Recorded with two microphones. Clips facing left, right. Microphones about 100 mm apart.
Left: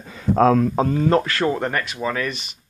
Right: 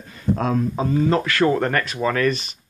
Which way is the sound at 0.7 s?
45° left (ahead or behind).